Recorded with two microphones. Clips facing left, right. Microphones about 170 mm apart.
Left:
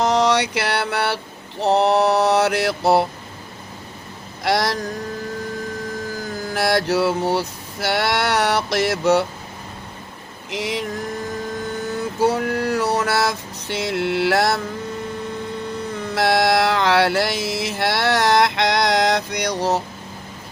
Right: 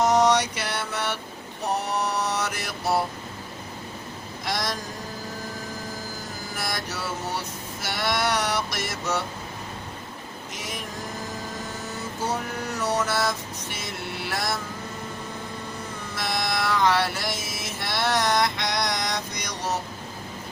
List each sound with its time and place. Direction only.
0.0 s mantra: 75° left (ahead or behind)
4.4 s mantra: 75° left (ahead or behind)
6.5 s mantra: 75° left (ahead or behind)
7.3 s a sound: 75° left (ahead or behind)
10.5 s mantra: 70° left (ahead or behind)
12.2 s a sound: 65° left (ahead or behind)
16.1 s music: 75° left (ahead or behind)